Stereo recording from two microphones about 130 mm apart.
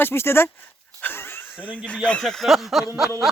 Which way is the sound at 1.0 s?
15° left (ahead or behind).